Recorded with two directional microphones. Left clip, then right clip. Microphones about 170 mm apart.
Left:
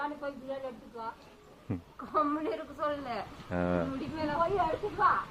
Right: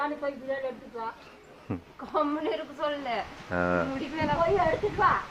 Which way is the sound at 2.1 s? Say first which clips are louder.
Right 2 dB; 15° right (ahead or behind).